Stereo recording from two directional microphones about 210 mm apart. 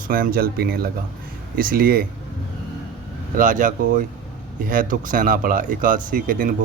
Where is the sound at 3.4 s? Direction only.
40° right (ahead or behind).